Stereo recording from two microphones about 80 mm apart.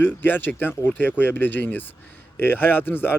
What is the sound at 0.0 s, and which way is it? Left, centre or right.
Speech, left.